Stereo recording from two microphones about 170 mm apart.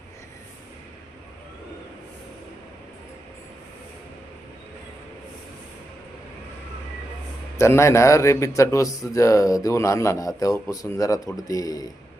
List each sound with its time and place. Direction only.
7.6 s speech: 15° left (ahead or behind)